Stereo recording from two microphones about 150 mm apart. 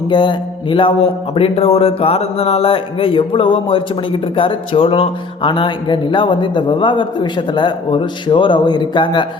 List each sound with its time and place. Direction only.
0.1 s speech: 30° left (ahead or behind)